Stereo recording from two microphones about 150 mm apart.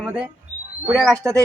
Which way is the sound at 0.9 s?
5° left (ahead or behind).